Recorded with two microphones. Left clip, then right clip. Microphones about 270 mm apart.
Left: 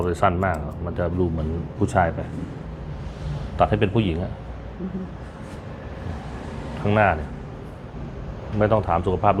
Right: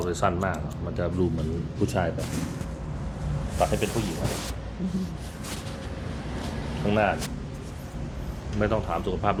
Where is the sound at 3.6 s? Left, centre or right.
Left.